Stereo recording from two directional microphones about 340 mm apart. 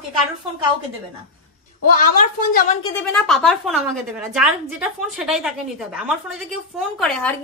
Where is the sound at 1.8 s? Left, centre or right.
Left.